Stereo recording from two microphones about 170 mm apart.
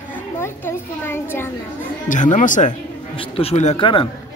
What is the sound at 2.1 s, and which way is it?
Speech, 45° left (ahead or behind).